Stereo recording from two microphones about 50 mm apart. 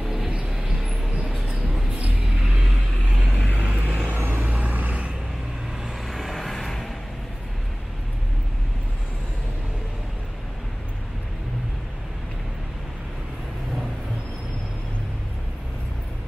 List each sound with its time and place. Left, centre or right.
0.0 s vehicle: centre
0.6 s vehicle: right
3.1 s vehicle: centre
3.5 s vehicle: right
6.0 s vehicle: centre